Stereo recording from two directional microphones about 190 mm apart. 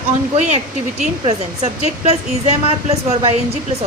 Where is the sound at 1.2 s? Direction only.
35° right (ahead or behind).